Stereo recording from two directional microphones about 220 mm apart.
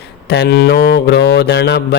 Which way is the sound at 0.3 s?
50° left (ahead or behind).